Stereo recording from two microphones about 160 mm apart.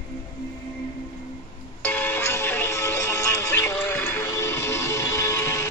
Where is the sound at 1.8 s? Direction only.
15° left (ahead or behind).